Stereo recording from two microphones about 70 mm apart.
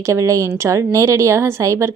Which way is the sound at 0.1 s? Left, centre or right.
Right.